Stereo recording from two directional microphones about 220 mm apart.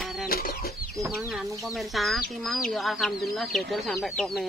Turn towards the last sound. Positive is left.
turn(degrees=0)  # may be behind; listen again after turning